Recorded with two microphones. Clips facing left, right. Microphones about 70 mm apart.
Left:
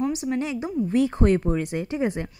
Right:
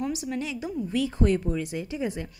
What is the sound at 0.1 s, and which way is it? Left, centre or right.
A woman's voice, left.